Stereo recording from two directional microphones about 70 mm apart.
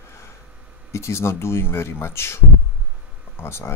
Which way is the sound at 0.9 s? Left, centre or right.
Left.